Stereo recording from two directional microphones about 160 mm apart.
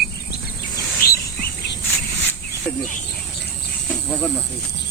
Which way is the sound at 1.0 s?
70° left (ahead or behind).